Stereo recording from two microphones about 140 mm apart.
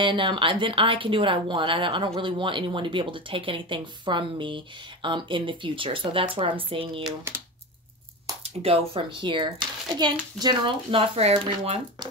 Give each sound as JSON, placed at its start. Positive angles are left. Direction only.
{"t": 0.0, "sound": "speech", "side_deg": -35}
{"t": 8.6, "sound": "speech", "side_deg": -45}